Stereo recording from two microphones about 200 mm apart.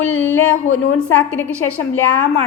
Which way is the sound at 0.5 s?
90° left.